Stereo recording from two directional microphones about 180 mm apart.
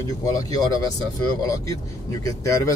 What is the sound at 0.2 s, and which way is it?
A man's voice, 20° left (ahead or behind).